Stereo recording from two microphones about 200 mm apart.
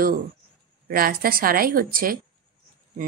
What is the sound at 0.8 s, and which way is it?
Speech, 45° right (ahead or behind).